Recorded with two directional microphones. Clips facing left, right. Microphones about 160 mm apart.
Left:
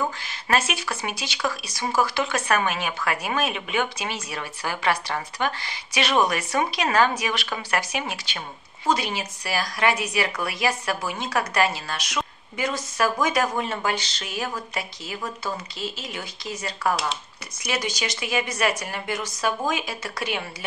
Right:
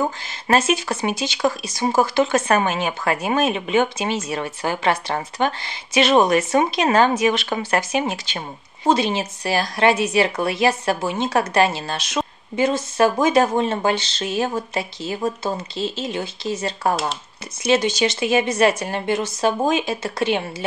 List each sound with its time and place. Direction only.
0.0 s speech: 25° right (ahead or behind)